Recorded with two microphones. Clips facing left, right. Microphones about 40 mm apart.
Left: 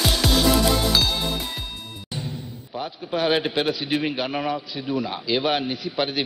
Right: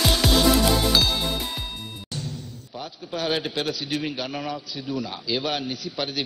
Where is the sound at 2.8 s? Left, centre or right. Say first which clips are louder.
Left 5 dB; centre.